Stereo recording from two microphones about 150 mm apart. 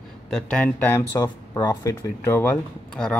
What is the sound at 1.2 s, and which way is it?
Speech, 25° left (ahead or behind).